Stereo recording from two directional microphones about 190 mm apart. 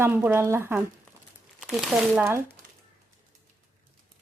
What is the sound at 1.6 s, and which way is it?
Speech, centre (ahead or behind).